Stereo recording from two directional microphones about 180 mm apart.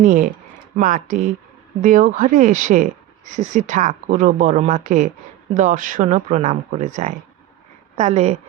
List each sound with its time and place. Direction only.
0.0 s a woman's voice: 45° right (ahead or behind)